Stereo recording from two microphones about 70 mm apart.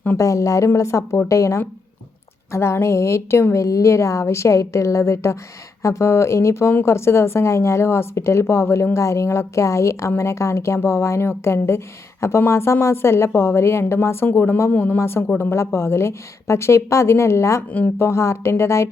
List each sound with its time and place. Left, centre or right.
0.2 s a woman's voice: left
14.9 s a woman's voice: left
17.7 s speech: left
18.0 s a woman's voice: left